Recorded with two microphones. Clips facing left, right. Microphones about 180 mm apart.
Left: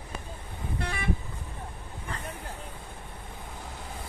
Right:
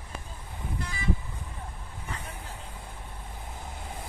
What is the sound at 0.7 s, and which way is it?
Vehicle, 60° left (ahead or behind).